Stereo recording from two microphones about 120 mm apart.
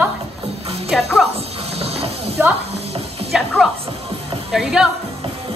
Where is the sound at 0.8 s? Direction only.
5° right (ahead or behind).